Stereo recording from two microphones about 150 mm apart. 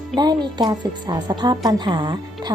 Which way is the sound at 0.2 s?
25° right (ahead or behind).